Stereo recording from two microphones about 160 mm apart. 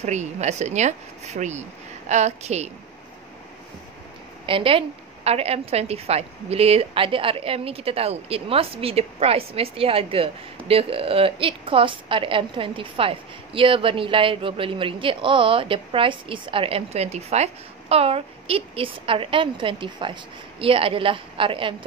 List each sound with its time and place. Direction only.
0.0 s a woman's voice: 45° right (ahead or behind)
4.5 s a woman's voice: 35° right (ahead or behind)